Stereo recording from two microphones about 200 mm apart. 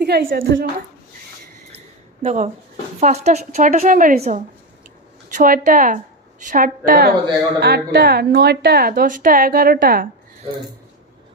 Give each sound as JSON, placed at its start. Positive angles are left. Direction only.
{"t": 0.0, "sound": "a woman's voice", "side_deg": -50}
{"t": 2.2, "sound": "a woman's voice", "side_deg": -35}